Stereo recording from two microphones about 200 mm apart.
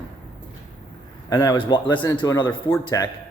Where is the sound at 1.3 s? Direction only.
20° left (ahead or behind).